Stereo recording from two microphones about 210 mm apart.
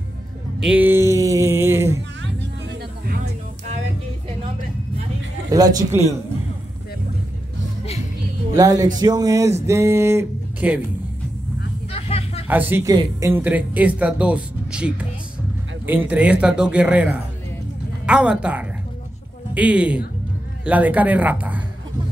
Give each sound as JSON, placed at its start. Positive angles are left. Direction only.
{"t": 0.6, "sound": "a sound", "side_deg": -5}
{"t": 2.4, "sound": "music", "side_deg": -55}
{"t": 5.5, "sound": "speech", "side_deg": -15}
{"t": 8.5, "sound": "speech", "side_deg": -15}
{"t": 9.7, "sound": "music", "side_deg": -15}
{"t": 11.9, "sound": "a sound", "side_deg": 30}
{"t": 12.4, "sound": "a woman's voice", "side_deg": -10}